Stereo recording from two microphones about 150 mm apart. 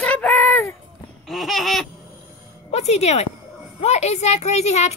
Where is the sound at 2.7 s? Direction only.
45° left (ahead or behind).